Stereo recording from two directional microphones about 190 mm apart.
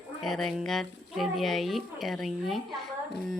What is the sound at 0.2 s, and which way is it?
A woman's voice, centre (ahead or behind).